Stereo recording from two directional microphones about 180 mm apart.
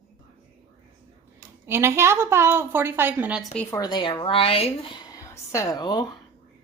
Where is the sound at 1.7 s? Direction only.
15° right (ahead or behind).